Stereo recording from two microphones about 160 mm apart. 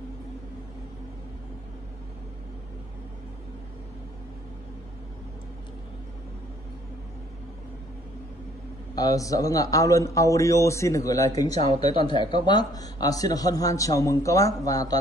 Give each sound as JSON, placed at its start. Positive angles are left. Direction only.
{"t": 8.9, "sound": "speech", "side_deg": 20}